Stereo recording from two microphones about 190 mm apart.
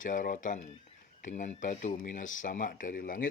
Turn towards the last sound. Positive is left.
turn(degrees=50)  # may be behind; listen again after turning